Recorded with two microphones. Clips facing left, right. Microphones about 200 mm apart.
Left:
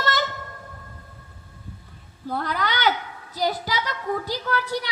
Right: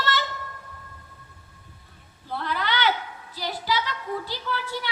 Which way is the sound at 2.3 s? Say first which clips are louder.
Left 2 dB; 45° left (ahead or behind).